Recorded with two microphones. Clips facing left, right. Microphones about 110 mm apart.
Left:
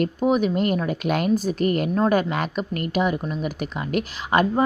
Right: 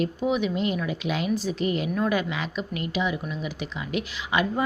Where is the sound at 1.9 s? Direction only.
40° left (ahead or behind).